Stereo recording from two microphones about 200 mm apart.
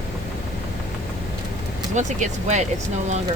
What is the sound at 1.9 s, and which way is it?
Speech, 35° right (ahead or behind).